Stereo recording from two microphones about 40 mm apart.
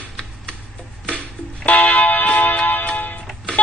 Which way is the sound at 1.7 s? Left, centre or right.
Left.